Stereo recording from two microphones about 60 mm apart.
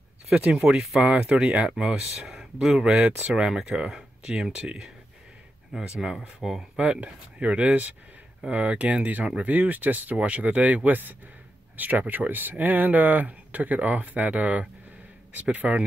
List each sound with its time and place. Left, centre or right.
0.5 s speech: centre
1.7 s speech: centre; by 3.3 s right
3.3 s speech: centre
6.8 s speech: right